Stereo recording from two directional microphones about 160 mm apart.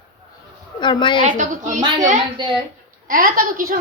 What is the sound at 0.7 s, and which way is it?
Speech, 30° left (ahead or behind).